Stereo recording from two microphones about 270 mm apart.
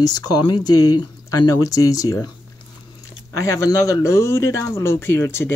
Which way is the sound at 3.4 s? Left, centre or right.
Centre.